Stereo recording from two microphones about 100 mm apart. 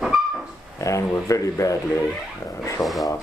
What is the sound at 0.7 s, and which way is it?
Speech, 30° left (ahead or behind).